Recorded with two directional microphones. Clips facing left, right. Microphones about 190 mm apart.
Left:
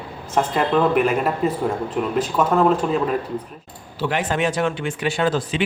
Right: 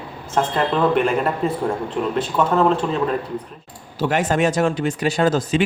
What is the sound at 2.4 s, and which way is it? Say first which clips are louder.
Speech: right 1 dB; 5° left (ahead or behind).